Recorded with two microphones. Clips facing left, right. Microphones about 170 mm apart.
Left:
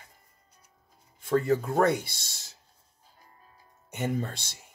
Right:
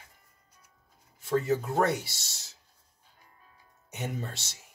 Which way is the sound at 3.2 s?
40° left (ahead or behind).